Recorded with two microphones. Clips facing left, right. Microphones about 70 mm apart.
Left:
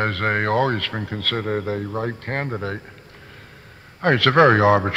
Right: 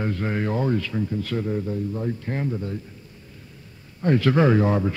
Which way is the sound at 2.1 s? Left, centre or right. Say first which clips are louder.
Left 1 dB; left.